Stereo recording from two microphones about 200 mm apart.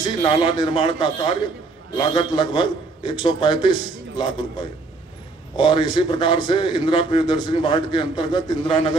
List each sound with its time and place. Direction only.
0.0 s a man's voice: 25° left (ahead or behind)
5.6 s a man's voice: 25° left (ahead or behind)